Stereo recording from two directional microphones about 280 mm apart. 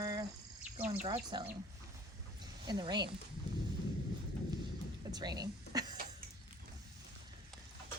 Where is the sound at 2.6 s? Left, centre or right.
Centre.